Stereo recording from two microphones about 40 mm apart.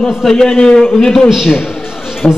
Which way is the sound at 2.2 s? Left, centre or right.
Left.